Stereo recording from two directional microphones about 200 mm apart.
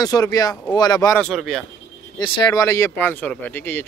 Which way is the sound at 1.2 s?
Centre (ahead or behind).